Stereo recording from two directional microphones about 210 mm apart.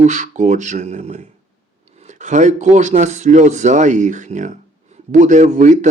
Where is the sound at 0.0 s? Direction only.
35° right (ahead or behind).